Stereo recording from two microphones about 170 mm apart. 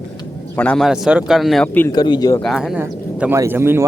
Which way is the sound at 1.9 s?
25° left (ahead or behind).